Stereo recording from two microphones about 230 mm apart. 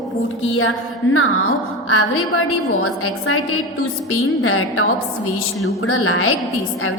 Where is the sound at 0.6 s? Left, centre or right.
Left.